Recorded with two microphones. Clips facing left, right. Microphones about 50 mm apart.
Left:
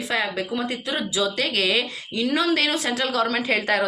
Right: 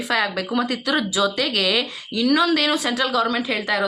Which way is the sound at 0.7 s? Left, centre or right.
Right.